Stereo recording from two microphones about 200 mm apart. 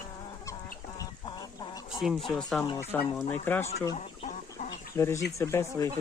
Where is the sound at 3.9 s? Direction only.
35° left (ahead or behind).